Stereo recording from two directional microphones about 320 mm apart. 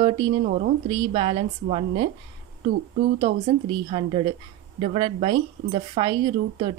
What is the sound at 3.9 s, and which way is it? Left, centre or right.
A woman's voice, centre.